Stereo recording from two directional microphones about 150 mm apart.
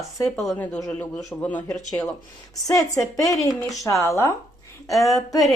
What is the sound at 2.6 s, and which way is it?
A woman's voice, 20° left (ahead or behind).